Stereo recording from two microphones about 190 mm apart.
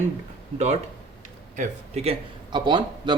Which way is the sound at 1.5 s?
35° right (ahead or behind).